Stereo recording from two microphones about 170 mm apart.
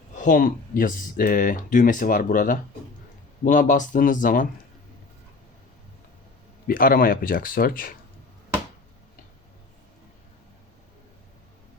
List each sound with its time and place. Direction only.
0.2 s speech: 55° left (ahead or behind)
6.7 s speech: 55° left (ahead or behind)